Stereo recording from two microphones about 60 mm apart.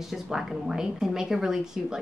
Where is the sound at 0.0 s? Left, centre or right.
Centre.